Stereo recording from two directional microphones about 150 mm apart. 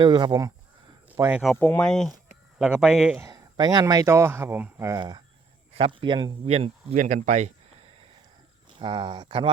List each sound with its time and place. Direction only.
0.0 s speech: 30° right (ahead or behind)
1.1 s speech: 10° right (ahead or behind)
1.5 s speech: 10° left (ahead or behind); by 3.2 s 5° right (ahead or behind)
3.2 s speech: 25° right (ahead or behind)
4.9 s speech: 30° right (ahead or behind); by 7.9 s 50° right (ahead or behind)
8.8 s speech: 30° right (ahead or behind)